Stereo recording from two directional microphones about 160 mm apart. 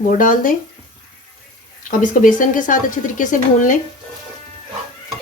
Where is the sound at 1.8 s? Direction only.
55° left (ahead or behind).